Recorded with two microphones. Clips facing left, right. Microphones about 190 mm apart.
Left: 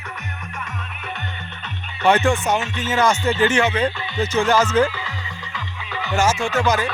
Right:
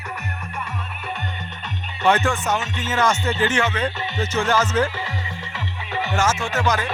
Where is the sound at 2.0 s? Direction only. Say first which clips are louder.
Left 2 dB; 15° left (ahead or behind).